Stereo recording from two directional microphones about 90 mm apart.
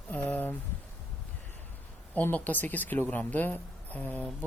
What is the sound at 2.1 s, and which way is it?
Speech, 20° left (ahead or behind).